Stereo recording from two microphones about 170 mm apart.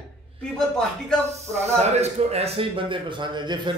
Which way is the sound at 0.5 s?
5° left (ahead or behind).